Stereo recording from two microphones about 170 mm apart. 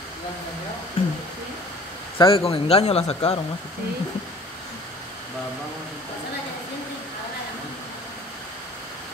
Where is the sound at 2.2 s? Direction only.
35° left (ahead or behind).